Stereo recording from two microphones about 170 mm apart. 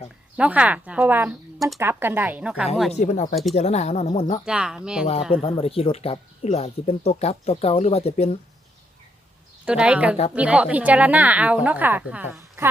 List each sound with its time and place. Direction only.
0.3 s a woman's voice: 10° right (ahead or behind)
2.9 s speech: 45° left (ahead or behind)
4.4 s speech: 5° right (ahead or behind)
5.3 s speech: 35° left (ahead or behind)
9.6 s a woman's voice: 5° right (ahead or behind)